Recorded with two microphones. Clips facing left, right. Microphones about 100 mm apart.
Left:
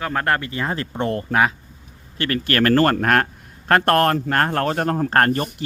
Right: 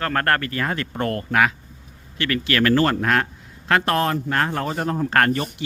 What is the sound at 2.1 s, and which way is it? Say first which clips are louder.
A man's voice: left 1 dB; 40° left (ahead or behind).